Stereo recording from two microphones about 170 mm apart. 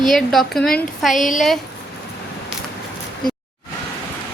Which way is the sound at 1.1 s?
50° left (ahead or behind).